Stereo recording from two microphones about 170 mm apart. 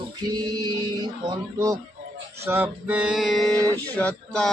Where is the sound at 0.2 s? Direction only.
25° right (ahead or behind).